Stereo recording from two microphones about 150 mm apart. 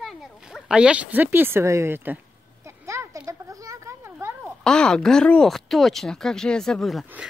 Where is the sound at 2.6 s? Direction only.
20° right (ahead or behind).